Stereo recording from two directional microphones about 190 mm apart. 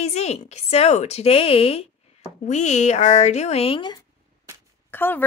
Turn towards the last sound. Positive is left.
turn(degrees=10)  # may be behind; listen again after turning